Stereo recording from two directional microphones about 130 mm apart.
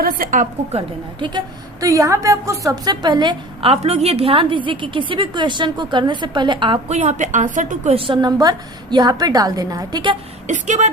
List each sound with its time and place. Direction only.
0.2 s a woman's voice: 80° right
0.7 s a woman's voice: 50° right (ahead or behind)
1.8 s a woman's voice: 25° right (ahead or behind)
6.8 s a woman's voice: 60° right (ahead or behind); by 7.9 s 80° right
7.9 s a woman's voice: 40° right (ahead or behind)
10.4 s speech: 65° right (ahead or behind)